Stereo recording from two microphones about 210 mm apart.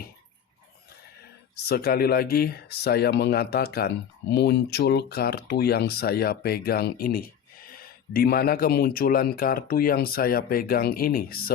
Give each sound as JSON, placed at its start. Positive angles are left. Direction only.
{"t": 1.6, "sound": "speech", "side_deg": 45}